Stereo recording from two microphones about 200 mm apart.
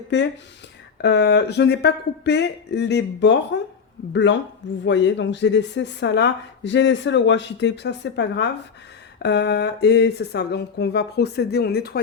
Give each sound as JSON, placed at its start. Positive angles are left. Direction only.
{"t": 0.1, "sound": "a woman's voice", "side_deg": 60}